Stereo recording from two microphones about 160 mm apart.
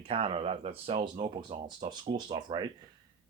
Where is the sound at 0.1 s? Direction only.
35° right (ahead or behind).